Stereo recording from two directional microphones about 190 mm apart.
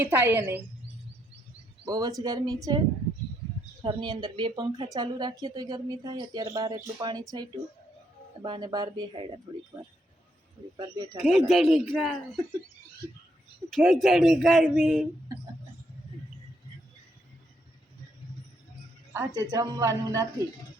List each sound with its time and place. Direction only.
0.0 s a woman's voice: 10° right (ahead or behind)
1.8 s a woman's voice: 20° right (ahead or behind)
3.8 s a woman's voice: 25° right (ahead or behind)
10.8 s a woman's voice: 20° right (ahead or behind)
11.2 s a man's voice: centre (ahead or behind)
13.7 s a man's voice: centre (ahead or behind)
19.1 s a woman's voice: 15° right (ahead or behind)